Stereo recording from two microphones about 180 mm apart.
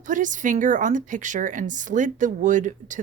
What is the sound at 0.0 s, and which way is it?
A woman's voice, 45° right (ahead or behind).